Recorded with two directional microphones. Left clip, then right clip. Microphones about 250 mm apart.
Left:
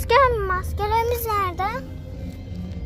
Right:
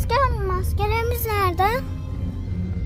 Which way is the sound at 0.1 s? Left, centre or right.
Centre.